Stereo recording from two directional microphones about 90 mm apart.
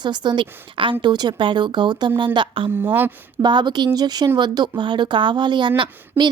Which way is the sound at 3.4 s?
55° right (ahead or behind).